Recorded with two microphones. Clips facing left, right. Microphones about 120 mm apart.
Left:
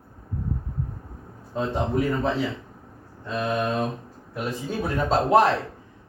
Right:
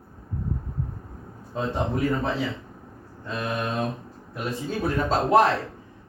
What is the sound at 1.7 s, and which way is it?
Speech, centre (ahead or behind).